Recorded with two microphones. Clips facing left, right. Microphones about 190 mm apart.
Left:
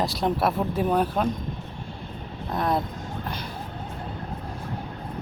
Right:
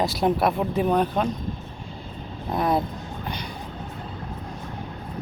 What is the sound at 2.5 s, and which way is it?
Speech, centre (ahead or behind).